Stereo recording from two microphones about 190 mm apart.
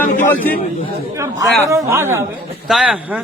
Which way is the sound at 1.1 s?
15° right (ahead or behind).